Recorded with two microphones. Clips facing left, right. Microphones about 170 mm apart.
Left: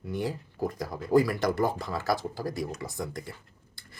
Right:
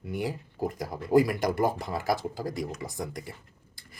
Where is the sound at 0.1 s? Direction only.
10° right (ahead or behind).